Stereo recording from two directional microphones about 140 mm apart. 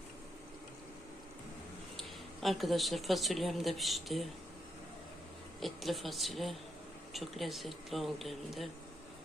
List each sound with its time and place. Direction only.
2.0 s speech: centre (ahead or behind)
5.5 s speech: centre (ahead or behind)